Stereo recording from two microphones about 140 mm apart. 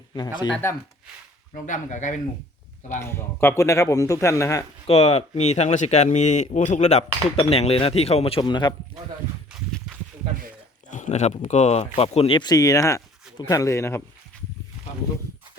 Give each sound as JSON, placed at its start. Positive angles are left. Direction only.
{"t": 0.1, "sound": "speech", "side_deg": 30}
{"t": 0.6, "sound": "speech", "side_deg": 20}
{"t": 1.5, "sound": "speech", "side_deg": 65}
{"t": 3.0, "sound": "speech", "side_deg": 20}
{"t": 4.9, "sound": "speech", "side_deg": 50}
{"t": 9.7, "sound": "a sound", "side_deg": 0}
{"t": 10.8, "sound": "speech", "side_deg": 60}